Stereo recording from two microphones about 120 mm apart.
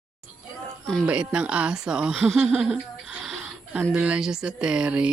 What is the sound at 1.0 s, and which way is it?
Speech, 10° right (ahead or behind).